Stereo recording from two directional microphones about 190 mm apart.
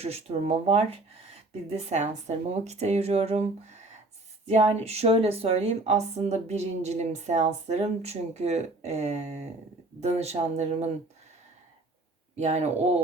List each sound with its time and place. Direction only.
0.0 s a woman's voice: 35° right (ahead or behind)
12.4 s a woman's voice: 35° right (ahead or behind)